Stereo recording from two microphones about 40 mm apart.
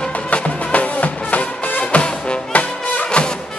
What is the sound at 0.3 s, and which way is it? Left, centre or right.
Music, left.